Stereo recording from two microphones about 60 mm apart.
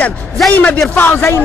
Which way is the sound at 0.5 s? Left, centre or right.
Left.